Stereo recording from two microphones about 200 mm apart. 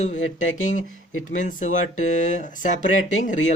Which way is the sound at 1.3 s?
40° left (ahead or behind).